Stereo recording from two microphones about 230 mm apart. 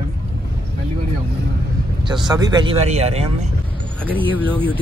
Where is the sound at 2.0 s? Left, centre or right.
Centre.